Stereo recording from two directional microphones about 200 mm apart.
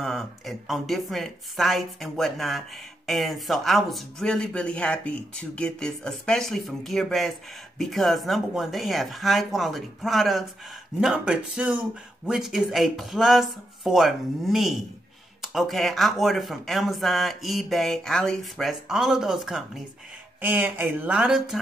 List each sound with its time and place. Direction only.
0.0 s speech: centre (ahead or behind)